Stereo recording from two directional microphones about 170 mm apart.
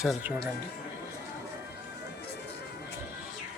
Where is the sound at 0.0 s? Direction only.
5° right (ahead or behind).